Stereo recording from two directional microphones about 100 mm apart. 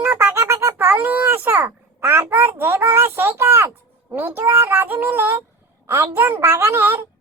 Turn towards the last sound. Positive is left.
turn(degrees=-25)  # may be behind; listen again after turning